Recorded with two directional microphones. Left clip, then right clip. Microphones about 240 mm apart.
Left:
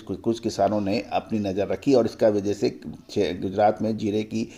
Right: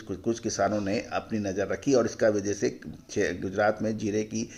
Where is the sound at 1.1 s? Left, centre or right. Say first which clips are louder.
Left 5 dB; centre.